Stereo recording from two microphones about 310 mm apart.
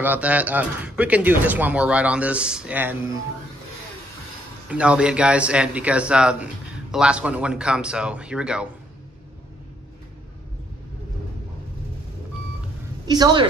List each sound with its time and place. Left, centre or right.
0.0 s a man's voice: centre
4.6 s a man's voice: centre
13.0 s a woman's voice: centre